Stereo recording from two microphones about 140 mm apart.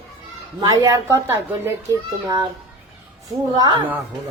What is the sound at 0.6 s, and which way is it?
A man's voice, 25° right (ahead or behind).